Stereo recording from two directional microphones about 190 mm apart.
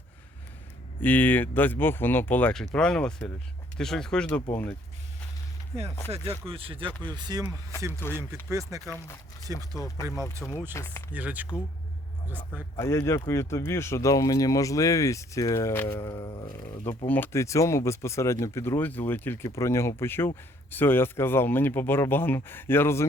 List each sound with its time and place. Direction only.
1.0 s speech: 10° left (ahead or behind)
6.1 s speech: 30° right (ahead or behind)
7.9 s speech: 10° left (ahead or behind)
8.4 s speech: 15° right (ahead or behind)
9.7 s speech: 15° left (ahead or behind)
11.1 s speech: 10° right (ahead or behind)
12.7 s speech: 20° left (ahead or behind)